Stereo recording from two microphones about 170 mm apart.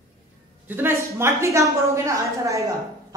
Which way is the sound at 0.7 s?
15° right (ahead or behind).